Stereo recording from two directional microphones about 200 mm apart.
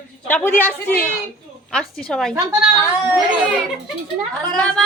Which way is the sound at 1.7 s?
Centre (ahead or behind).